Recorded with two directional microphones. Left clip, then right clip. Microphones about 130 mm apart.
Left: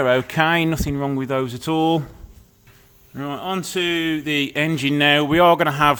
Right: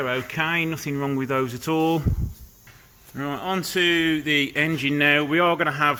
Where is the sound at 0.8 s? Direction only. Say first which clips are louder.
Left 2 dB; 30° left (ahead or behind).